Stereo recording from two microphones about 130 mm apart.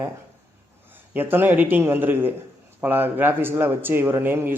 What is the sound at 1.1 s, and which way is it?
A man's voice, 15° right (ahead or behind).